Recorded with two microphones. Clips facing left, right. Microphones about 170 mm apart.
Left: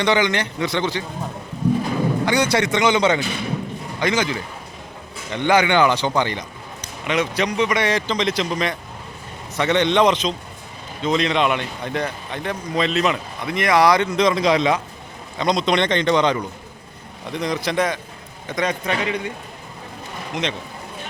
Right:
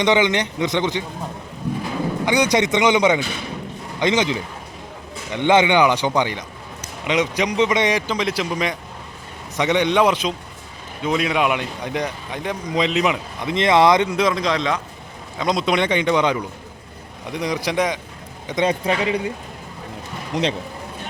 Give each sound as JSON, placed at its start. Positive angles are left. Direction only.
{"t": 0.0, "sound": "a man's voice", "side_deg": -20}
{"t": 2.2, "sound": "a man's voice", "side_deg": -15}
{"t": 14.2, "sound": "a man's voice", "side_deg": -5}
{"t": 14.4, "sound": "a man's voice", "side_deg": 10}
{"t": 15.4, "sound": "a man's voice", "side_deg": -5}
{"t": 18.4, "sound": "a man's voice", "side_deg": -25}
{"t": 20.3, "sound": "speech", "side_deg": -35}